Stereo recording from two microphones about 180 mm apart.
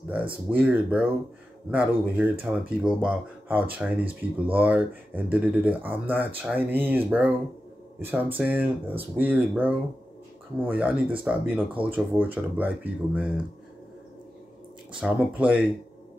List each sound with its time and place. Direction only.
0.5 s speech: 10° right (ahead or behind)
4.0 s speech: 30° right (ahead or behind)
4.6 s speech: 10° right (ahead or behind)
15.0 s speech: 5° right (ahead or behind)